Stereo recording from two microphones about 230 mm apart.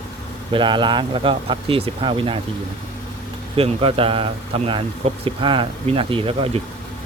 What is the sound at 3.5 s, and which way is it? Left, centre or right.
Speech, right.